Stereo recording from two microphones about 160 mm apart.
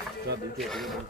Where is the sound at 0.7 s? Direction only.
Centre (ahead or behind).